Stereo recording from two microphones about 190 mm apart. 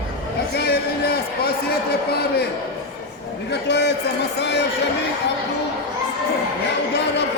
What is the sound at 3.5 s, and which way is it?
A man's voice, 65° left (ahead or behind).